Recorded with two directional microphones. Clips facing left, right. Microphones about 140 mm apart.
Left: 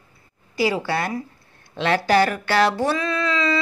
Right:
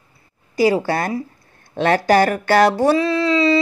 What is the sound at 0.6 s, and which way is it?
Speech, 45° right (ahead or behind).